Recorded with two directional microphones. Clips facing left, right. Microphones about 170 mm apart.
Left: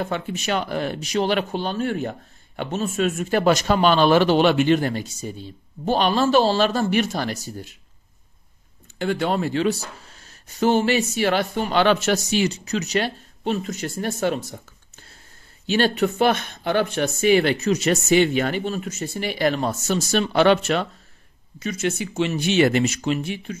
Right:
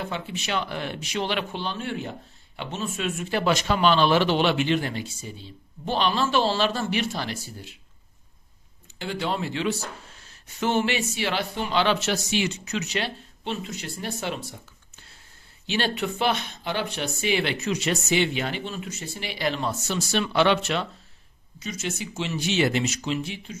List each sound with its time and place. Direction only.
0.0 s speech: 45° left (ahead or behind)
8.9 s speech: 50° left (ahead or behind)
15.6 s speech: 45° left (ahead or behind)
21.5 s speech: 60° left (ahead or behind)